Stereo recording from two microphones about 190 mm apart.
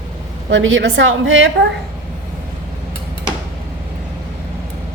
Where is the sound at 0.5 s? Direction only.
85° right.